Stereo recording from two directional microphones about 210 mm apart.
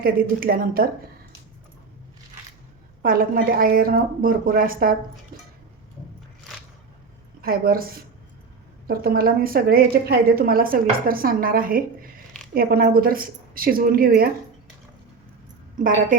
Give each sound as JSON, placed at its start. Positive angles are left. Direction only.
{"t": 0.0, "sound": "a woman's voice", "side_deg": -45}
{"t": 3.0, "sound": "a woman's voice", "side_deg": -45}
{"t": 7.4, "sound": "a woman's voice", "side_deg": -45}
{"t": 8.9, "sound": "a woman's voice", "side_deg": -45}